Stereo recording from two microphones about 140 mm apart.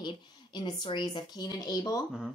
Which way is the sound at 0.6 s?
30° left (ahead or behind).